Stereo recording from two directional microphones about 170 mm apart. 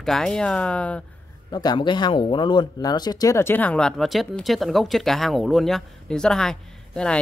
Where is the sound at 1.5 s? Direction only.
25° left (ahead or behind).